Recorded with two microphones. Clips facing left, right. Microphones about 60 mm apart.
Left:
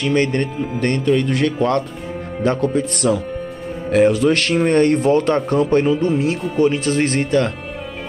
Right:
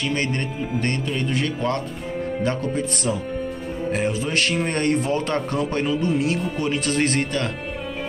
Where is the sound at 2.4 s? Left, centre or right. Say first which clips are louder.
Left 9 dB; left.